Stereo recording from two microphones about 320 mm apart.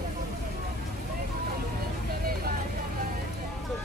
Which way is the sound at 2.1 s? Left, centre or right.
Right.